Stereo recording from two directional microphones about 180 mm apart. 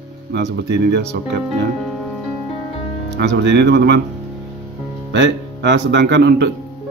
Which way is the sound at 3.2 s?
75° right (ahead or behind).